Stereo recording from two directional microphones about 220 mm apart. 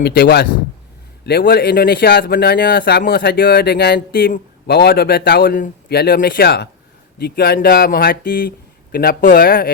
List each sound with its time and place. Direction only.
0.0 s speech: 45° left (ahead or behind)